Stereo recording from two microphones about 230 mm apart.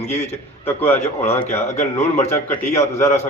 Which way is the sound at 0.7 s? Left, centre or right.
Centre.